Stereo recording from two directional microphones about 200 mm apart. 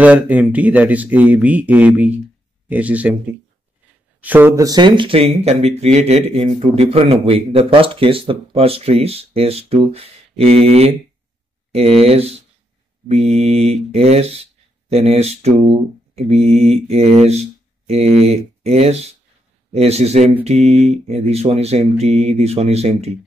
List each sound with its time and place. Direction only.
0.0 s speech: 5° right (ahead or behind)
4.2 s speech: 10° right (ahead or behind); by 23.1 s 30° right (ahead or behind)